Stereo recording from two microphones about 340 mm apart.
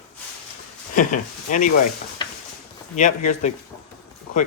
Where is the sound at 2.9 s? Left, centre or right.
Left.